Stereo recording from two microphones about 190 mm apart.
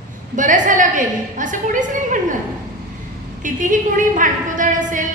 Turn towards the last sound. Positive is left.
turn(degrees=-45)  # may be behind; listen again after turning